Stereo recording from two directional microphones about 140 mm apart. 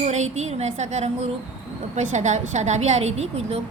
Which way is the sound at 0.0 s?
55° right (ahead or behind).